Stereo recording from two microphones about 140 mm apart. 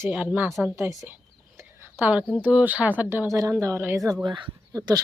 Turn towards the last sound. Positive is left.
turn(degrees=-25)  # may be behind; listen again after turning